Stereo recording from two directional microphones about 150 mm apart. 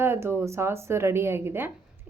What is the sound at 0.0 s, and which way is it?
A woman's voice, 15° right (ahead or behind).